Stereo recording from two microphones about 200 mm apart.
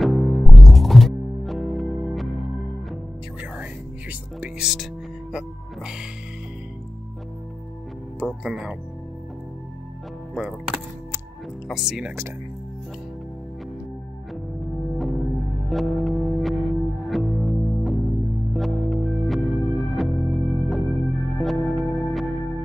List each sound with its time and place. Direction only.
0.0 s music: centre (ahead or behind)
4.1 s speech: 5° right (ahead or behind)
8.5 s speech: 5° right (ahead or behind)
10.3 s music: 5° right (ahead or behind)
11.6 s speech: centre (ahead or behind)
15.0 s music: centre (ahead or behind)